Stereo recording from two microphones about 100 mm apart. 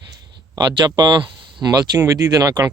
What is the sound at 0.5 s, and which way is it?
Speech, 45° right (ahead or behind).